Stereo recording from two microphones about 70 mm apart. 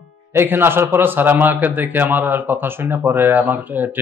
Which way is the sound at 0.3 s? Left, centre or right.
Right.